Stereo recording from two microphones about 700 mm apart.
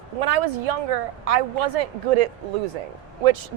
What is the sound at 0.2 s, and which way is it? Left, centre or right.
Speech, right.